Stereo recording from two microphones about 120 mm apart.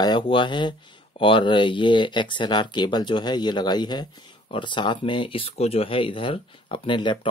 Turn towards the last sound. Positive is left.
turn(degrees=40)  # may be behind; listen again after turning